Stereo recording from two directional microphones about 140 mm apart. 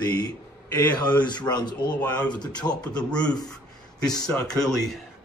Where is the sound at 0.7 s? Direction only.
30° left (ahead or behind).